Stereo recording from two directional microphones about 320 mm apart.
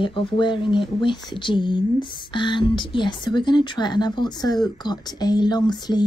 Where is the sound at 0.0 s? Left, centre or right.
Centre.